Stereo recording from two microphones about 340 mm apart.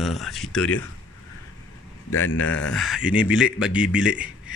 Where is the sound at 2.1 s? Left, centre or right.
Left.